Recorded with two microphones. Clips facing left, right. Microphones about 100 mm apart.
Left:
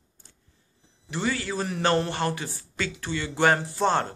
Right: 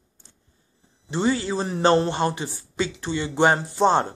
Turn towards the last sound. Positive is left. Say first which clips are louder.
# right 5 dB
turn(degrees=-20)  # may be behind; listen again after turning